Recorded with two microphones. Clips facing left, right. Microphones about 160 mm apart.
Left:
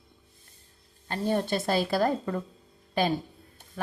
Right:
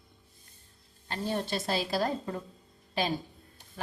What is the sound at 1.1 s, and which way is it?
A woman's voice, 50° left (ahead or behind).